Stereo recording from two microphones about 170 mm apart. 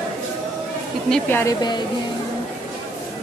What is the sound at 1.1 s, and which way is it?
Speech, 15° left (ahead or behind).